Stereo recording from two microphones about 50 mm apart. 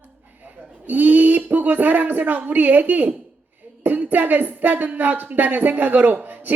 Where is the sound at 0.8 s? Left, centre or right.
Right.